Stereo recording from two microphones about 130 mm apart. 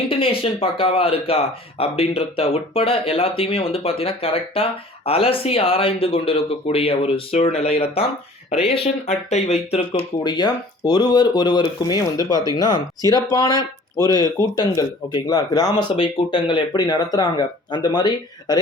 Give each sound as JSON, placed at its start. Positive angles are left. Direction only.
{"t": 0.1, "sound": "speech", "side_deg": 45}
{"t": 10.2, "sound": "speech", "side_deg": 30}